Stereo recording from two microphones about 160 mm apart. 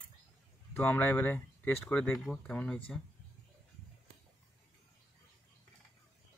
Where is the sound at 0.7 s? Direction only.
10° left (ahead or behind).